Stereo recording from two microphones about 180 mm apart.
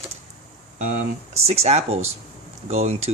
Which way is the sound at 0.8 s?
50° right (ahead or behind).